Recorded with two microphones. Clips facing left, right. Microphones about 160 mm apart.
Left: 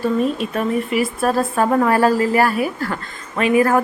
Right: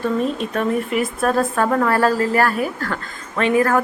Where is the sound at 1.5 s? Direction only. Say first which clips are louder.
Left 2 dB; 15° left (ahead or behind).